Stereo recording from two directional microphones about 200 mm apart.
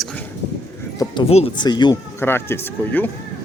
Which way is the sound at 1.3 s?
25° left (ahead or behind).